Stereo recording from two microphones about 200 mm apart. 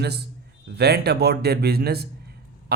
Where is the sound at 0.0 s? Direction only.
55° right (ahead or behind).